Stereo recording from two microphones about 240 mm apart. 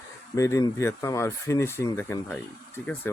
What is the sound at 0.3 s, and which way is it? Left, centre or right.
Speech, centre.